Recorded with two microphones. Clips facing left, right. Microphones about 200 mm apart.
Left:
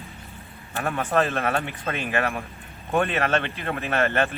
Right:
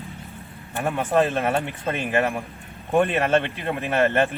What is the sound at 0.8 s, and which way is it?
A man's voice, 15° right (ahead or behind).